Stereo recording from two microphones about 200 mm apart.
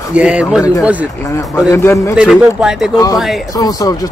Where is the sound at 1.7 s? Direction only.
15° left (ahead or behind).